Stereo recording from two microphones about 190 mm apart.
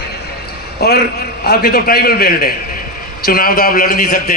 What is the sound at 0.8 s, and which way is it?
A man's voice, 55° left (ahead or behind).